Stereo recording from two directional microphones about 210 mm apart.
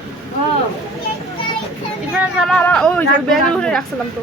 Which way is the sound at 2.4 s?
5° left (ahead or behind).